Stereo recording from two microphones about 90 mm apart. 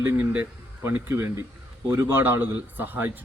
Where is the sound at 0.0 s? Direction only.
20° right (ahead or behind).